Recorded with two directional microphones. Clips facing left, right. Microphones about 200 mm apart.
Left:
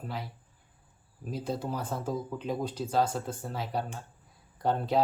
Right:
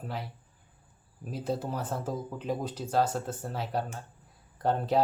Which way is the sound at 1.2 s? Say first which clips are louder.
Right 1 dB; 5° right (ahead or behind).